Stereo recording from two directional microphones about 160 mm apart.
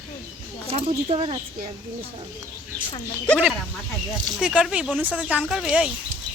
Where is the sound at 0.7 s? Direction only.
35° right (ahead or behind).